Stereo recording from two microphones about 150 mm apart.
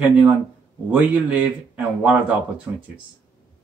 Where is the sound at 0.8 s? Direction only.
10° right (ahead or behind).